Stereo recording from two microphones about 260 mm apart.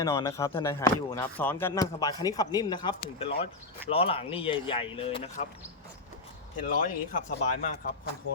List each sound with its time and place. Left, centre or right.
0.0 s speech: centre
6.7 s speech: left